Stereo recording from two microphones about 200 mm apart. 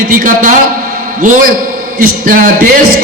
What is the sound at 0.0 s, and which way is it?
Speech, 45° right (ahead or behind).